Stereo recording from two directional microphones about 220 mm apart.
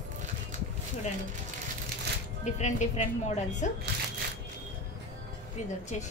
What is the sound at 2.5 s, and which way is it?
A woman's voice, 35° left (ahead or behind).